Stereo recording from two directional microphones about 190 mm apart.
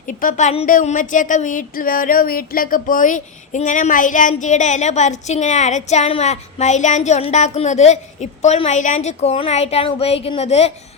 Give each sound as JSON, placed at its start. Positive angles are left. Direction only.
{"t": 0.1, "sound": "speech", "side_deg": 45}